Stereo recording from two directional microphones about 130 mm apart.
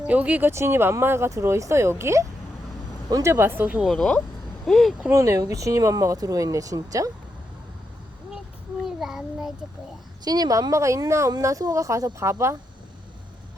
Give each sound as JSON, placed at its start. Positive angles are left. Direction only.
{"t": 0.1, "sound": "speech", "side_deg": -10}
{"t": 3.8, "sound": "speech", "side_deg": 5}
{"t": 5.1, "sound": "speech", "side_deg": -25}
{"t": 8.8, "sound": "child singing", "side_deg": 0}
{"t": 10.2, "sound": "speech", "side_deg": -30}